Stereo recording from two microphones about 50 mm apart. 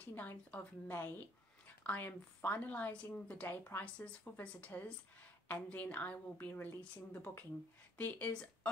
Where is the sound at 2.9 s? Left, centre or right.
Left.